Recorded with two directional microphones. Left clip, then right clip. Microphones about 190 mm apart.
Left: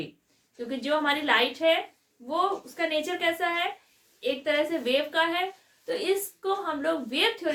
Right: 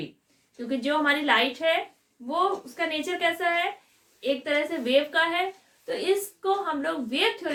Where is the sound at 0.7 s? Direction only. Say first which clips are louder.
Right 2 dB; centre (ahead or behind).